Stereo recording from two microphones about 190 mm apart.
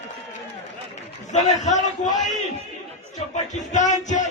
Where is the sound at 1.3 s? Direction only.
40° left (ahead or behind).